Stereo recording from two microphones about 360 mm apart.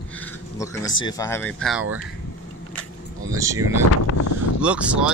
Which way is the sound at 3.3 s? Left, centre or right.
Centre.